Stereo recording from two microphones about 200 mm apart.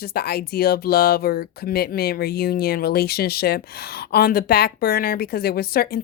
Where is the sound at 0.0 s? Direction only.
50° left (ahead or behind).